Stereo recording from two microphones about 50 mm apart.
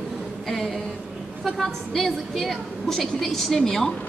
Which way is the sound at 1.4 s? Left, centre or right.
Centre.